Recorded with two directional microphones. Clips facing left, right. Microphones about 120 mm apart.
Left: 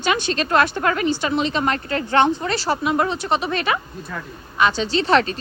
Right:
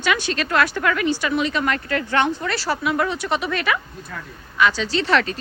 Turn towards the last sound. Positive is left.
turn(degrees=25)  # may be behind; listen again after turning